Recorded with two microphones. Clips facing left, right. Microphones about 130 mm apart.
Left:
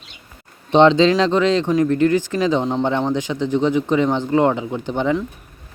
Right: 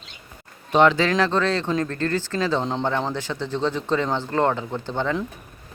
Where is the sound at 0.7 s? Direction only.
25° left (ahead or behind).